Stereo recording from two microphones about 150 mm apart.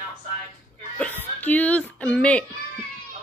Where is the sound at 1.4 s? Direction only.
10° left (ahead or behind).